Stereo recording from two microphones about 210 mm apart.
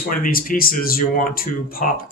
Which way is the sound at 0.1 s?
45° left (ahead or behind).